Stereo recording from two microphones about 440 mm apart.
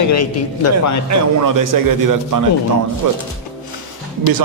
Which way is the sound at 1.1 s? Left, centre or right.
Right.